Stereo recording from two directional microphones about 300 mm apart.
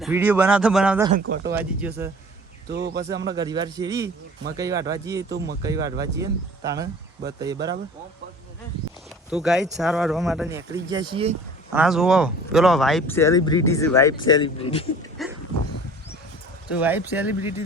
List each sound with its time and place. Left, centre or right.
0.0 s a man's voice: centre
2.6 s speech: right
3.3 s a man's voice: centre
7.3 s a man's voice: centre
9.3 s a man's voice: centre
11.7 s speech: centre
15.2 s a sound: centre
16.6 s speech: centre